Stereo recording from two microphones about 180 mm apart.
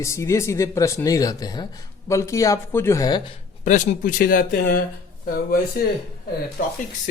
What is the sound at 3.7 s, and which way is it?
Speech, 45° left (ahead or behind).